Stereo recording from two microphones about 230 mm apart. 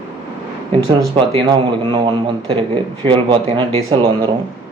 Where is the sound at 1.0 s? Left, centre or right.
Right.